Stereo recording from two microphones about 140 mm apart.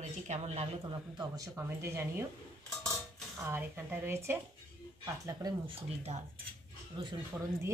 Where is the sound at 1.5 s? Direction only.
20° right (ahead or behind).